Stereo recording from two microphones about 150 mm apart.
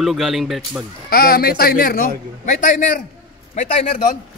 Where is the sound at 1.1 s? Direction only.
85° left; by 4.2 s 60° left (ahead or behind).